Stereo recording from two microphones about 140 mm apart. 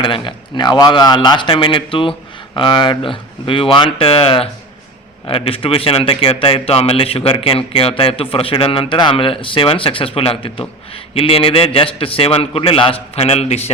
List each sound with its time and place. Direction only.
0.0 s speech: 35° left (ahead or behind)